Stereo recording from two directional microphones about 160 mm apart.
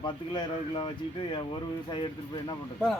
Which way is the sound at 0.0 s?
25° left (ahead or behind).